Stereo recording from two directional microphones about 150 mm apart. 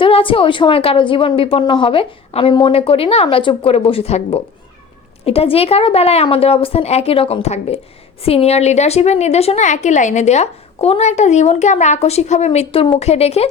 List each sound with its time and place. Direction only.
0.0 s a woman's voice: 35° left (ahead or behind)